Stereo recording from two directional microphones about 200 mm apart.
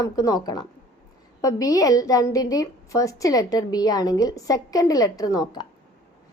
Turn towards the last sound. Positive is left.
turn(degrees=20)  # may be behind; listen again after turning